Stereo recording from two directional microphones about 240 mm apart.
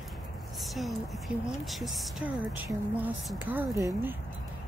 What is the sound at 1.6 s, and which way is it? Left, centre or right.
Speech, centre.